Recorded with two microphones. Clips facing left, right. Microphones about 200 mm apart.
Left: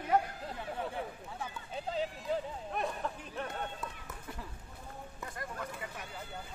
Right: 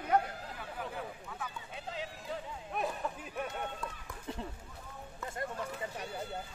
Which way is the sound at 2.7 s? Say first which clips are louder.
Right 1 dB; 5° right (ahead or behind).